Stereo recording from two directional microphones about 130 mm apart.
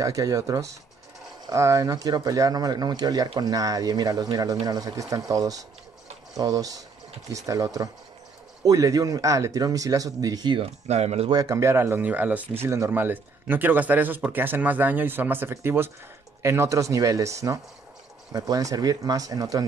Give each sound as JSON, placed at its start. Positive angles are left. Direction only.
{"t": 0.0, "sound": "speech", "side_deg": -25}
{"t": 10.6, "sound": "speech", "side_deg": -55}
{"t": 11.2, "sound": "speech", "side_deg": -25}